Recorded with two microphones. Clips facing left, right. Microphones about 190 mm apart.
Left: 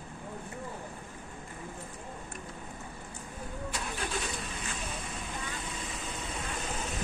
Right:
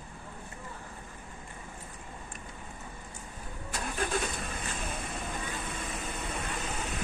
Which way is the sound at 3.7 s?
50° right (ahead or behind).